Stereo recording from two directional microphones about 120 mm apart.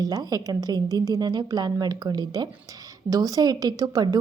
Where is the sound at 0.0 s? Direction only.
30° right (ahead or behind).